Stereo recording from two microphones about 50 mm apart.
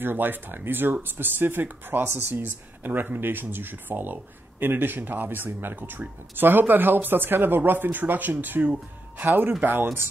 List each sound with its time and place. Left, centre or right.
0.0 s speech: right